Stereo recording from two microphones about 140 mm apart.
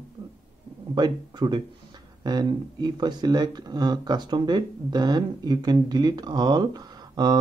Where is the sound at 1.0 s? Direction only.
30° right (ahead or behind).